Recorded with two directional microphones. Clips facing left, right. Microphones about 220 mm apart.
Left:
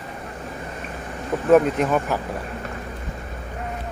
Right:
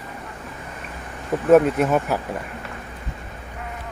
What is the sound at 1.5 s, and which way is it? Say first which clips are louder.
Speech: right 1 dB; 5° right (ahead or behind).